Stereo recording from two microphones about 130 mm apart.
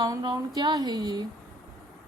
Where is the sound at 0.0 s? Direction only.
30° right (ahead or behind).